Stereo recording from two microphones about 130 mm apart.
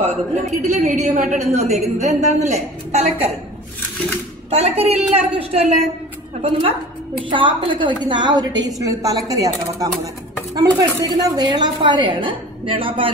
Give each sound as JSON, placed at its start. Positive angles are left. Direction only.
{"t": 0.0, "sound": "a woman's voice", "side_deg": -60}
{"t": 4.5, "sound": "a woman's voice", "side_deg": -55}
{"t": 7.2, "sound": "a woman's voice", "side_deg": -40}